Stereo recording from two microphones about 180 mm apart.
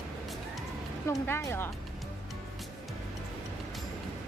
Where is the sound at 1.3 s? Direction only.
15° left (ahead or behind).